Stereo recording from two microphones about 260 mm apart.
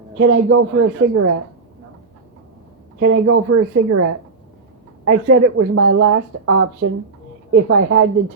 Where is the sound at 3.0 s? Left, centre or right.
Right.